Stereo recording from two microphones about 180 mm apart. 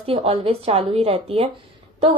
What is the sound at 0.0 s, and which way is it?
A woman's voice, 35° right (ahead or behind).